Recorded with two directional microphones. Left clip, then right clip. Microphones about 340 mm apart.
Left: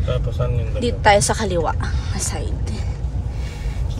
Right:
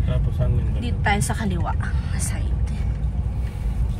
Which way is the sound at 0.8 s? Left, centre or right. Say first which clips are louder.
Left 10 dB; centre.